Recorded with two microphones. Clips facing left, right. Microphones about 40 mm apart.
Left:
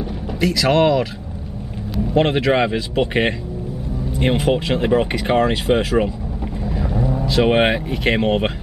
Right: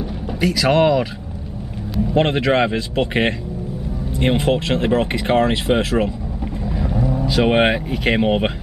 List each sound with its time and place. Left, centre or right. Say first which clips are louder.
0.4 s speech: even; centre
2.1 s speech: even; centre
6.6 s vehicle: even; centre
7.2 s speech: even; centre